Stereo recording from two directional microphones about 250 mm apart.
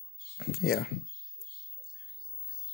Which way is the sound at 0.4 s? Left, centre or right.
Left.